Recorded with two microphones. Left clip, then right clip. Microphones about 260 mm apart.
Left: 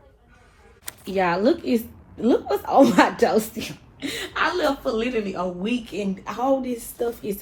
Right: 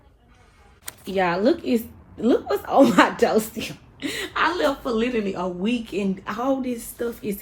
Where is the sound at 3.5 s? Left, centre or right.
Left.